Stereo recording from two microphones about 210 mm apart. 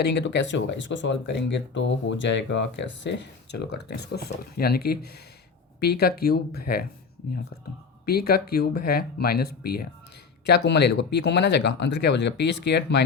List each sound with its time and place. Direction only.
0.0 s speech: 55° left (ahead or behind)
8.0 s speech: 50° left (ahead or behind)